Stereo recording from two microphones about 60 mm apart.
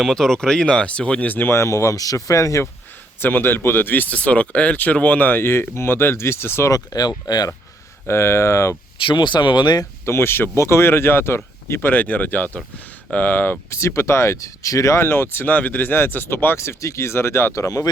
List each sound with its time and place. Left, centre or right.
0.0 s speech: centre; by 1.5 s left
1.5 s speech: left
3.2 s speech: left
6.7 s speech: left
8.0 s speech: left
10.1 s speech: left
13.7 s speech: left
15.0 s speech: left
16.6 s speech: left
17.5 s speech: left